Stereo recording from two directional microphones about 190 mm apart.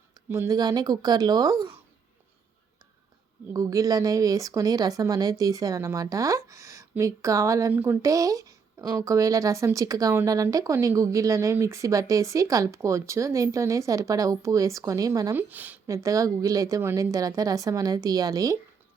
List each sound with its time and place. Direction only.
0.3 s speech: 15° right (ahead or behind)
3.5 s speech: 15° right (ahead or behind)